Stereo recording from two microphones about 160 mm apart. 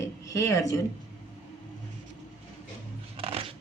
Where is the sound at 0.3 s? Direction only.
20° left (ahead or behind).